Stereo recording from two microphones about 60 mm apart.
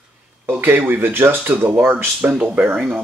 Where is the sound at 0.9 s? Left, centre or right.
Right.